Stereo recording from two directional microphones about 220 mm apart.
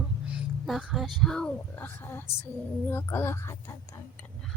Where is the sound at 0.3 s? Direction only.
Centre (ahead or behind).